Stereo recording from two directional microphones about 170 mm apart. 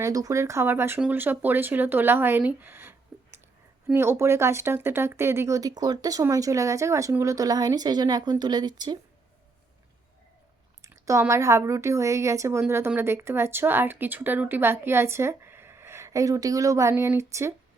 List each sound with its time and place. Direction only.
0.0 s speech: 20° right (ahead or behind)
3.1 s a sound: 5° right (ahead or behind)
3.9 s speech: 15° right (ahead or behind)
10.8 s speech: 20° right (ahead or behind)